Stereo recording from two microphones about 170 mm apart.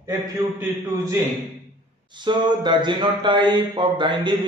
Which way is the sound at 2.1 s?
25° right (ahead or behind).